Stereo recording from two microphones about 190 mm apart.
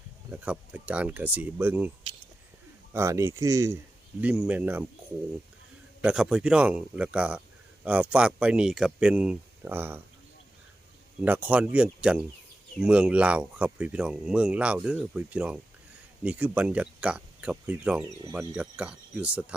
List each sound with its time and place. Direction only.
0.3 s speech: 5° right (ahead or behind)
2.9 s speech: 15° right (ahead or behind)
6.0 s speech: 5° right (ahead or behind)
11.3 s speech: 10° right (ahead or behind)